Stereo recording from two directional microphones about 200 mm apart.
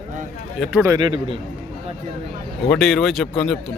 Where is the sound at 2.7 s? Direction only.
Centre (ahead or behind).